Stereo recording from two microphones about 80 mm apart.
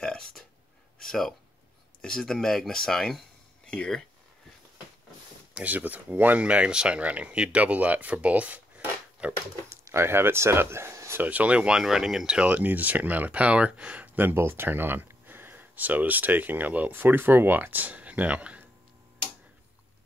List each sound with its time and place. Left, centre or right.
0.0 s a sound: centre
2.0 s speech: centre
5.5 s speech: centre
9.7 s speech: right
11.2 s speech: centre